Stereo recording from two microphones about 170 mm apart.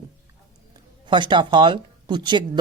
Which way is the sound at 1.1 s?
25° right (ahead or behind).